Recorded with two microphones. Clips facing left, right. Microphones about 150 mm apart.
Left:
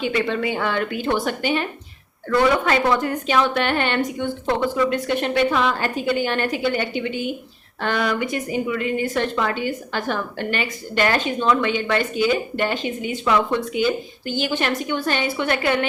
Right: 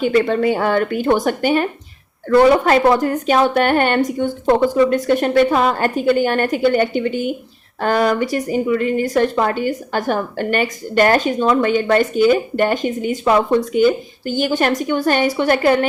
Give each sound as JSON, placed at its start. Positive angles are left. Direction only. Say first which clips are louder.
{"t": 0.0, "sound": "speech", "louder": "right 7 dB", "side_deg": -40}